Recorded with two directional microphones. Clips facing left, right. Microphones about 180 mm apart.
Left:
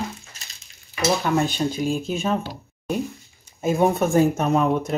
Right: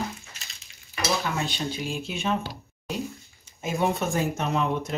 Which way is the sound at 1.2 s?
50° left (ahead or behind).